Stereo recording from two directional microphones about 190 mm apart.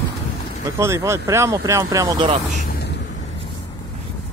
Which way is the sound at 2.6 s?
55° left (ahead or behind).